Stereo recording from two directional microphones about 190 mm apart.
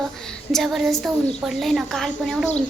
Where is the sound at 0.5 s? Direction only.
Centre (ahead or behind).